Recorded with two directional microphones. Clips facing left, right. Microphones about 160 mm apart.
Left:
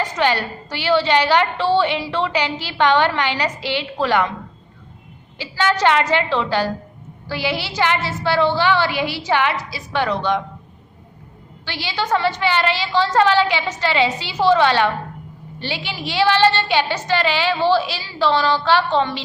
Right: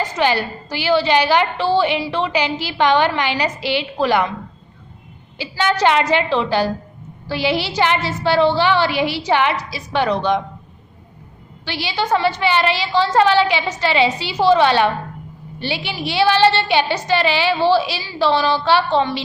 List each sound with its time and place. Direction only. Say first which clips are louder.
0.2 s a woman's voice: right 2 dB; 10° right (ahead or behind)
5.4 s a woman's voice: right 1 dB; 15° right (ahead or behind)
11.6 s a woman's voice: right 2 dB; 15° right (ahead or behind)